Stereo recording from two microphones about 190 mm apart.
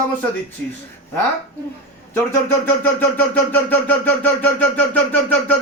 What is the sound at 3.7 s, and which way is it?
Speech, 10° left (ahead or behind).